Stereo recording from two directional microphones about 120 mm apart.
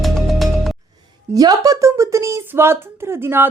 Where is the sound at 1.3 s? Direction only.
30° right (ahead or behind).